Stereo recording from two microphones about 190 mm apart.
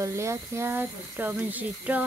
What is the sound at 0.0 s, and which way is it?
Speech, 15° right (ahead or behind).